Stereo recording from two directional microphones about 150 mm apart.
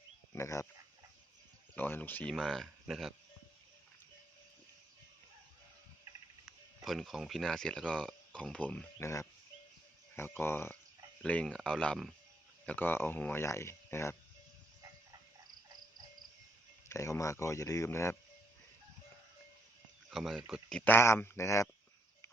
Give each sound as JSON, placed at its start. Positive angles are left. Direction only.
{"t": 0.3, "sound": "speech", "side_deg": 20}
{"t": 1.7, "sound": "speech", "side_deg": 10}
{"t": 6.8, "sound": "speech", "side_deg": 0}
{"t": 10.2, "sound": "speech", "side_deg": 15}
{"t": 16.9, "sound": "speech", "side_deg": 20}
{"t": 20.1, "sound": "speech", "side_deg": 0}